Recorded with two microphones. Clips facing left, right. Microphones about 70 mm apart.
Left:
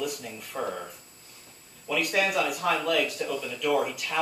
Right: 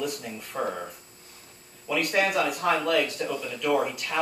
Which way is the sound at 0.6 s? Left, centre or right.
Centre.